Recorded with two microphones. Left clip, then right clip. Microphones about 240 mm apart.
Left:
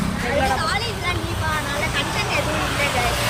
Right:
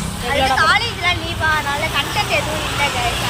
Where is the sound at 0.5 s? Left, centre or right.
Centre.